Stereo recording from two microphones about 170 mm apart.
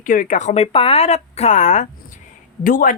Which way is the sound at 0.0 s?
50° left (ahead or behind).